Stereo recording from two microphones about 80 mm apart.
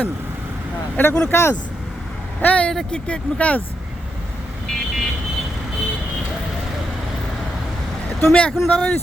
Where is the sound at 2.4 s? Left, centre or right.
Centre.